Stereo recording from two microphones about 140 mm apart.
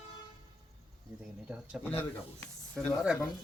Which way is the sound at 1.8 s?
15° left (ahead or behind).